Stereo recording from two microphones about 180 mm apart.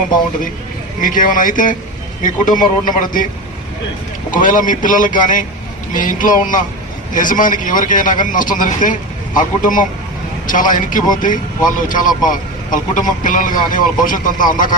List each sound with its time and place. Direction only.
1.0 s a man's voice: 50° left (ahead or behind)
4.3 s a man's voice: 45° left (ahead or behind)